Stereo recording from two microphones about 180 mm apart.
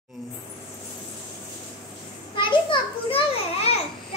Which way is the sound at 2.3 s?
25° left (ahead or behind).